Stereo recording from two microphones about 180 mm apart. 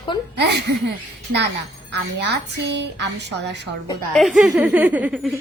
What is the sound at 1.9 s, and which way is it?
A woman's voice, 70° right (ahead or behind).